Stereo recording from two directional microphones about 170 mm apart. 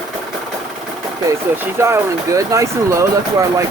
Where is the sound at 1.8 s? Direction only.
15° right (ahead or behind).